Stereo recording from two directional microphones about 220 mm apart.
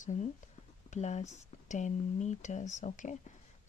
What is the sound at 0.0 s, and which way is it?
Speech, 35° left (ahead or behind).